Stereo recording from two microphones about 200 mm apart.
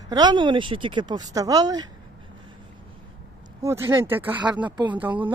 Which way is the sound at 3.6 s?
15° right (ahead or behind).